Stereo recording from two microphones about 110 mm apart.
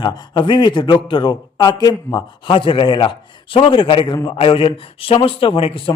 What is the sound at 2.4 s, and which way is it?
A man's voice, 50° left (ahead or behind).